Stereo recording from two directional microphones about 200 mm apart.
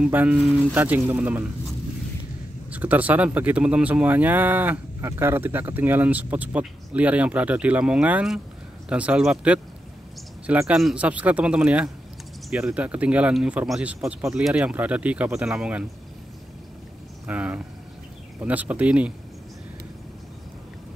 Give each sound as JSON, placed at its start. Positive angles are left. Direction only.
{"t": 0.0, "sound": "speech", "side_deg": -5}
{"t": 2.7, "sound": "speech", "side_deg": -10}
{"t": 17.3, "sound": "speech", "side_deg": -5}